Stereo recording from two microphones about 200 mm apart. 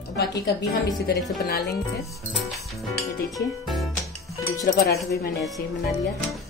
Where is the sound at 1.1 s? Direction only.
50° left (ahead or behind).